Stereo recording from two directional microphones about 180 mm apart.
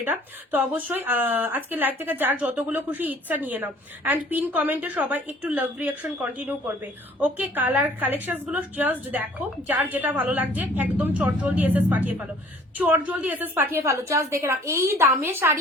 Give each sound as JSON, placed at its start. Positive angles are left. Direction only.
{"t": 0.0, "sound": "speech", "side_deg": -10}